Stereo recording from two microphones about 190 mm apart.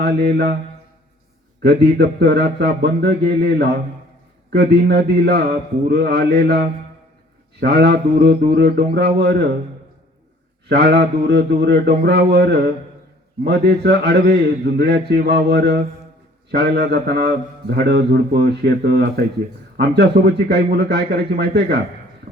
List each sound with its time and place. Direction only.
0.0 s a man's voice: 60° right (ahead or behind)
1.6 s a man's voice: 60° right (ahead or behind)
7.6 s a man's voice: 60° right (ahead or behind)
10.7 s a man's voice: 60° right (ahead or behind)